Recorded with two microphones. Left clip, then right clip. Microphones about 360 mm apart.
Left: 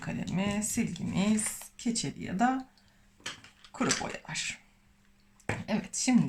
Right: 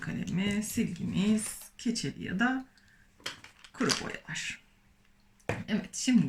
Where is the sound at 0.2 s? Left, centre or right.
Centre.